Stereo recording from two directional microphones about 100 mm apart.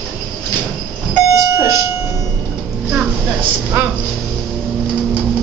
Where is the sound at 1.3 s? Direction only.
30° right (ahead or behind).